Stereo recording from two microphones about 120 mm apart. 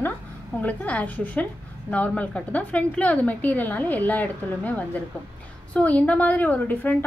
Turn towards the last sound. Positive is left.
turn(degrees=15)  # may be behind; listen again after turning